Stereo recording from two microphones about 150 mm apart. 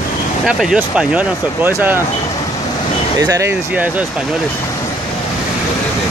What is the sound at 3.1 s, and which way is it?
Speech, 20° right (ahead or behind).